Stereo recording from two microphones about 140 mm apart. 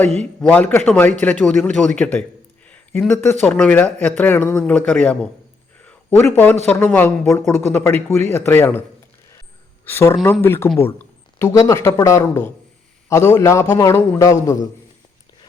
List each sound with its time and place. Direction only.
0.2 s speech: 10° left (ahead or behind)
2.6 s a sound: 10° left (ahead or behind)
3.1 s speech: 15° left (ahead or behind)
5.8 s a sound: 10° left (ahead or behind)
6.7 s speech: 10° left (ahead or behind)
9.8 s a man's voice: 15° left (ahead or behind)